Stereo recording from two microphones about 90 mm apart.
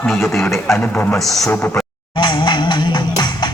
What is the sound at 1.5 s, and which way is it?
Speech, 20° left (ahead or behind).